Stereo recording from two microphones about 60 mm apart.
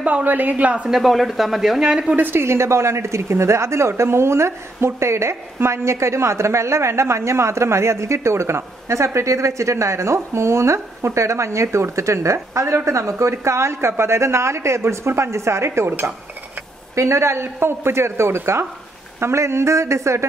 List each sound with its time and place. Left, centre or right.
0.0 s speech: right
0.8 s speech: centre
2.1 s speech: right
2.4 s a woman's voice: right